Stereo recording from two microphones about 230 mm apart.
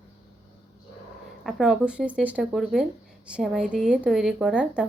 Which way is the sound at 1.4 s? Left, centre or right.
Centre.